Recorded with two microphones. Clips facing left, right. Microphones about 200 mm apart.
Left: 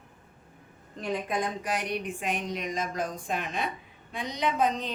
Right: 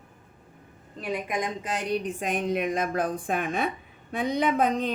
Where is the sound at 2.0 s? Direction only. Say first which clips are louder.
Right 4 dB; 45° right (ahead or behind).